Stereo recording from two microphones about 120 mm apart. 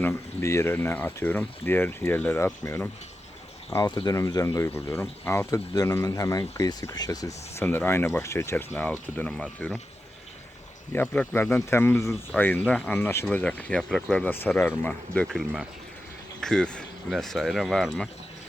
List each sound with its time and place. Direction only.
0.0 s speech: 20° left (ahead or behind)
3.8 s speech: 35° left (ahead or behind)
7.6 s speech: 15° left (ahead or behind)
10.9 s speech: 15° left (ahead or behind)
16.4 s speech: 5° left (ahead or behind)